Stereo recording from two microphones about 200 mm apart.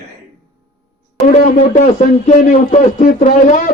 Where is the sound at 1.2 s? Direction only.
40° left (ahead or behind).